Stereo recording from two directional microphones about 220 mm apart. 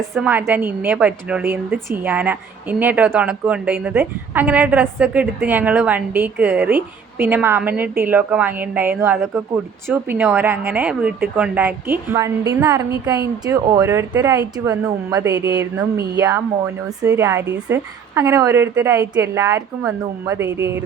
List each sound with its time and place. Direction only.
0.1 s a woman's voice: 5° right (ahead or behind)
15.5 s speech: 50° right (ahead or behind)
17.0 s a woman's voice: 15° right (ahead or behind)